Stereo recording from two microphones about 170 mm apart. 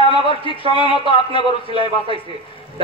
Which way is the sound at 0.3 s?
30° left (ahead or behind).